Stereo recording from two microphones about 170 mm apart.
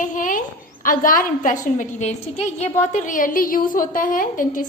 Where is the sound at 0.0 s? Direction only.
50° left (ahead or behind).